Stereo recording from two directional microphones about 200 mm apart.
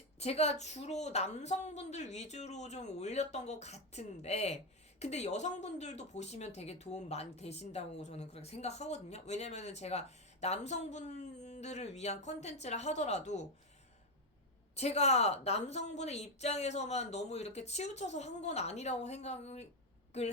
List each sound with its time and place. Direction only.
0.2 s a woman's voice: 30° left (ahead or behind)
14.8 s a woman's voice: 35° left (ahead or behind)